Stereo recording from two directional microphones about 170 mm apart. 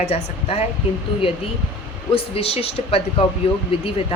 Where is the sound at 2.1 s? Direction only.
35° left (ahead or behind).